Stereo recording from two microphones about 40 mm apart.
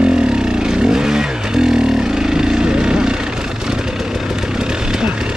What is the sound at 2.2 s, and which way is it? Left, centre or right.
Vehicle, centre.